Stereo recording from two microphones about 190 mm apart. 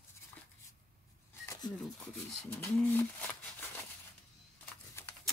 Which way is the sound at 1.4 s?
15° left (ahead or behind).